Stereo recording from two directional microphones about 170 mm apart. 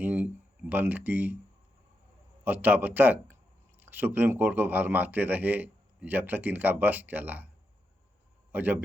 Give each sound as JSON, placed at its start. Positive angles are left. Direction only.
{"t": 0.0, "sound": "speech", "side_deg": -10}
{"t": 2.4, "sound": "speech", "side_deg": -10}
{"t": 8.5, "sound": "speech", "side_deg": -10}